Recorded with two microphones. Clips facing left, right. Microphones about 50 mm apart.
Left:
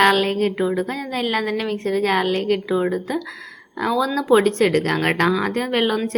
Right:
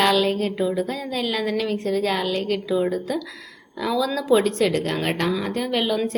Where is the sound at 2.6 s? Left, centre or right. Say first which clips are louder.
Left 1 dB; left.